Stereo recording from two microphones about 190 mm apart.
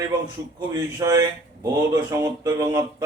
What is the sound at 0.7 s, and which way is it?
Speech, 15° right (ahead or behind).